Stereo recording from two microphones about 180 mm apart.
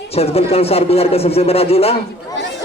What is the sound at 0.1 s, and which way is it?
Speech, 35° left (ahead or behind).